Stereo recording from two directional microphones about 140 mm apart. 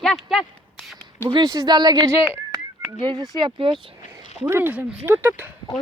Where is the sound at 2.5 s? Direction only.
30° right (ahead or behind).